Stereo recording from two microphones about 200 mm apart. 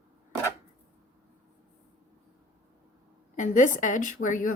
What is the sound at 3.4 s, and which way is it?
A woman's voice, 40° left (ahead or behind).